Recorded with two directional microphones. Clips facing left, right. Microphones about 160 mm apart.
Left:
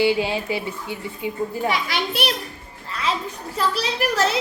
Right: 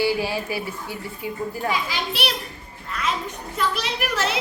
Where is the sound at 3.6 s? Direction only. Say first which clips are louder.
Left 3 dB; 35° left (ahead or behind).